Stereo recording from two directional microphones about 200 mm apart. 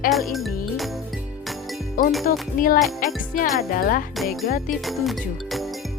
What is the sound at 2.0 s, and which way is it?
Speech, 45° left (ahead or behind).